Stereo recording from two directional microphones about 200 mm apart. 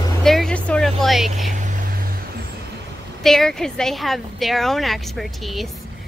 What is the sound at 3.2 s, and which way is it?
A woman's voice, centre (ahead or behind).